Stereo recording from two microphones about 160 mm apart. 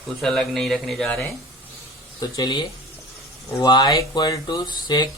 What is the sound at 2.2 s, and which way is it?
Speech, 25° left (ahead or behind).